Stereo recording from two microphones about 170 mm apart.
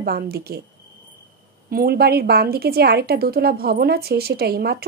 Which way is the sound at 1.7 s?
65° right (ahead or behind).